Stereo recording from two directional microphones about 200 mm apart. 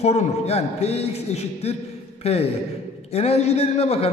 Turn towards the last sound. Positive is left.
turn(degrees=30)  # may be behind; listen again after turning